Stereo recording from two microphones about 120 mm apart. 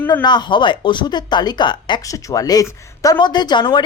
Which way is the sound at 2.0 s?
30° left (ahead or behind).